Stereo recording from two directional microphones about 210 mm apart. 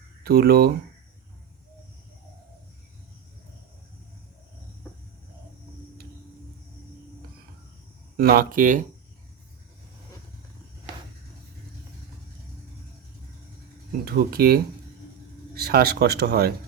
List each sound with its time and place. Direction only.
0.3 s speech: 45° right (ahead or behind)
8.1 s speech: 45° right (ahead or behind)
14.0 s speech: 45° right (ahead or behind)
15.6 s speech: 50° right (ahead or behind)